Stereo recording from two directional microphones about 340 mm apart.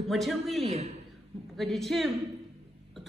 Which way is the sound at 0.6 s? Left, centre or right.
Centre.